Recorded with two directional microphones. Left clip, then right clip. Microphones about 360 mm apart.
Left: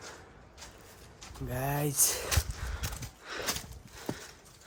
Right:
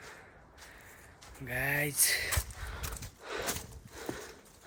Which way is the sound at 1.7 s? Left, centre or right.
Centre.